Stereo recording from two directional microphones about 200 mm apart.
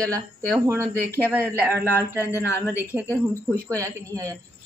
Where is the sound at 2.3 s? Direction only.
15° left (ahead or behind).